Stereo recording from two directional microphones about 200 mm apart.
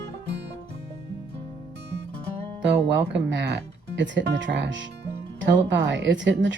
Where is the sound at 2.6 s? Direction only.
60° right (ahead or behind).